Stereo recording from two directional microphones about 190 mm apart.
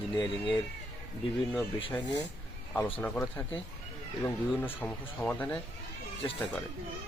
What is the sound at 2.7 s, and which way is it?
Speech, 10° left (ahead or behind).